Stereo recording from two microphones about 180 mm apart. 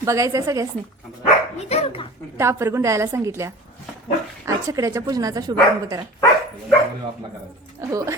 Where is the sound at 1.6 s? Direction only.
35° left (ahead or behind).